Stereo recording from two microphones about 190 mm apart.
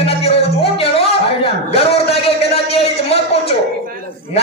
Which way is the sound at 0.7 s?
30° left (ahead or behind).